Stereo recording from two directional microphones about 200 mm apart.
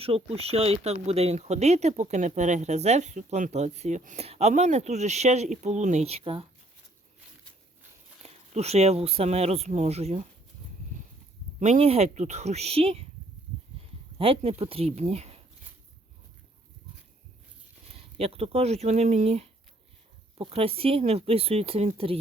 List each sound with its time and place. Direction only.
0.0 s speech: 30° right (ahead or behind)
8.2 s speech: 30° right (ahead or behind)
11.6 s speech: 35° right (ahead or behind)
14.2 s speech: 30° right (ahead or behind)
18.2 s speech: 30° right (ahead or behind)